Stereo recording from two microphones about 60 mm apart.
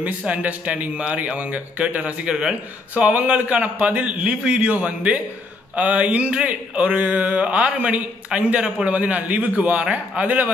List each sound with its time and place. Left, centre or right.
0.0 s speech: right